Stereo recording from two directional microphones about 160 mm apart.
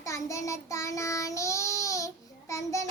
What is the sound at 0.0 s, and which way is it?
Child singing, 20° left (ahead or behind).